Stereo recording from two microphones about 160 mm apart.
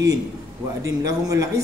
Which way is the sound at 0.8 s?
20° right (ahead or behind).